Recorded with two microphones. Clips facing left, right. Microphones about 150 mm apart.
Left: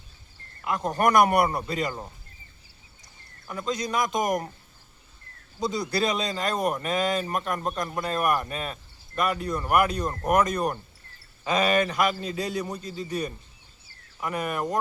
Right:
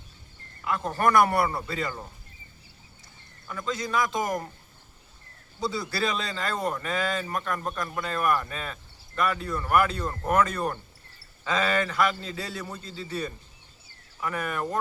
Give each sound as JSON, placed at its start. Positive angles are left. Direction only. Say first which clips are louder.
{"t": 0.6, "sound": "a man's voice", "louder": "left 1 dB", "side_deg": 20}
{"t": 3.4, "sound": "a man's voice", "louder": "left 2 dB", "side_deg": 20}
{"t": 5.5, "sound": "a man's voice", "louder": "left 3 dB", "side_deg": 20}